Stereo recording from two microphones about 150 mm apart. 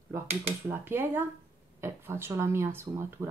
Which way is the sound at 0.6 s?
15° right (ahead or behind).